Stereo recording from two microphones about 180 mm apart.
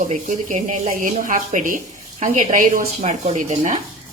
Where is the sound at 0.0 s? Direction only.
45° right (ahead or behind).